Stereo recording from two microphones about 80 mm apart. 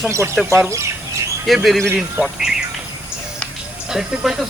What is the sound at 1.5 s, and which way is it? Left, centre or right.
Speech, centre.